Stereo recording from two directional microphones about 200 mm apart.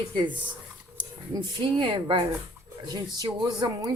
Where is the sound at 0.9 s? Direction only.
25° right (ahead or behind).